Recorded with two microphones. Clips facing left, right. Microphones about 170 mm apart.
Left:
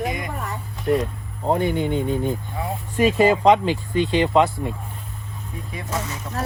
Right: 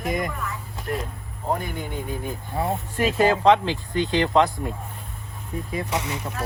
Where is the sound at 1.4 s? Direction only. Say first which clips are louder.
Left 6 dB; 25° left (ahead or behind).